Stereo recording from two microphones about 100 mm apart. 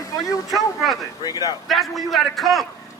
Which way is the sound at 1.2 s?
40° left (ahead or behind).